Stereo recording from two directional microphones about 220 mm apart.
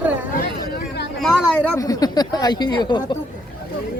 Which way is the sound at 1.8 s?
15° left (ahead or behind).